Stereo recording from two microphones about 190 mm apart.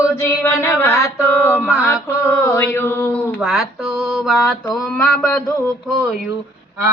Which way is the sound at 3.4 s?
Centre (ahead or behind).